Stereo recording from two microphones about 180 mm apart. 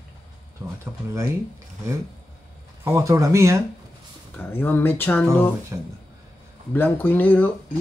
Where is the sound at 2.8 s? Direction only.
15° right (ahead or behind).